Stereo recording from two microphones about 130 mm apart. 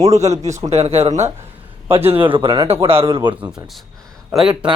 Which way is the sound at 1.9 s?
50° right (ahead or behind).